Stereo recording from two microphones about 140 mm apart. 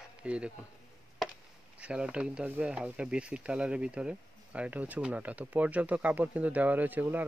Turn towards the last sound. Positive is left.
turn(degrees=-15)  # may be behind; listen again after turning